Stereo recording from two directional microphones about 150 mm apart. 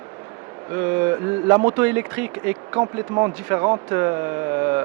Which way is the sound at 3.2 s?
25° right (ahead or behind).